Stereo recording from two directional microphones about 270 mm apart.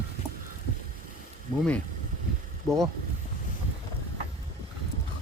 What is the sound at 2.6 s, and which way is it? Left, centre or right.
Speech, centre.